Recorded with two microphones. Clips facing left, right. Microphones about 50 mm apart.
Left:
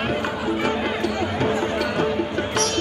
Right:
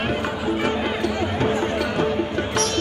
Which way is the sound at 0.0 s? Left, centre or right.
Centre.